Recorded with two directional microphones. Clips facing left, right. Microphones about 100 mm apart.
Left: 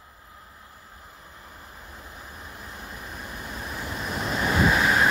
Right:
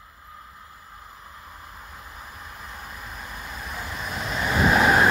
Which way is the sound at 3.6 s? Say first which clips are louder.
Even; 30° left (ahead or behind).